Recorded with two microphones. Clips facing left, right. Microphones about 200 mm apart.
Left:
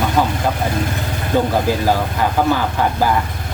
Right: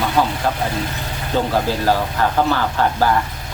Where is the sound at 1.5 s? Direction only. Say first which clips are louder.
Left 1 dB; 15° left (ahead or behind).